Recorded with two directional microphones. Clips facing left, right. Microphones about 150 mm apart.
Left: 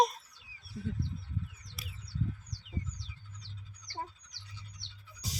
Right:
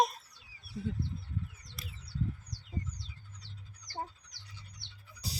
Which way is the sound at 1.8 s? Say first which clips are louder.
Right 1 dB; 5° left (ahead or behind).